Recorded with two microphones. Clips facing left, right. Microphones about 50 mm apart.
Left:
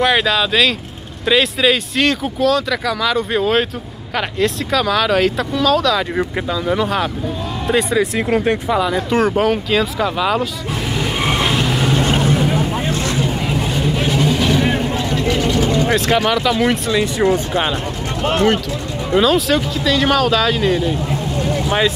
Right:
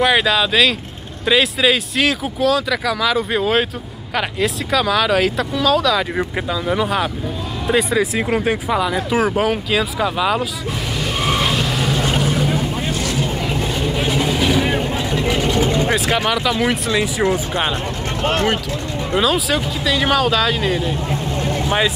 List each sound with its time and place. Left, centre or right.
0.0 s speech: centre
11.0 s vehicle: centre
12.9 s vehicle: left
13.9 s vehicle: centre
15.9 s speech: centre
19.1 s speech: centre